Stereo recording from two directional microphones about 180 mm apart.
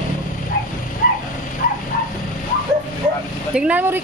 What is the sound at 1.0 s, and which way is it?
Dog, 50° left (ahead or behind).